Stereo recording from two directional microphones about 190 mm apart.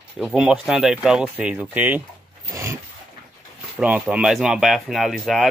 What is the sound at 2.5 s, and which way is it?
Zipper, 15° right (ahead or behind).